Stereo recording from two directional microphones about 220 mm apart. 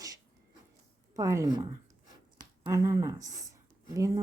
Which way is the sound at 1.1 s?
15° right (ahead or behind).